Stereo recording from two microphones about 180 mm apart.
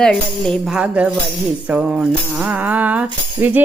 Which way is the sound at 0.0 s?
5° left (ahead or behind).